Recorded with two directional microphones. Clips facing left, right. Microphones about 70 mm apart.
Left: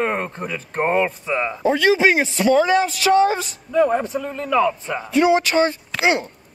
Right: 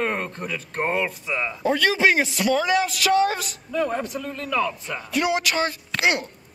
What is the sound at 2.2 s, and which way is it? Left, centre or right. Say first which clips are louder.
Speech: left 6 dB; left.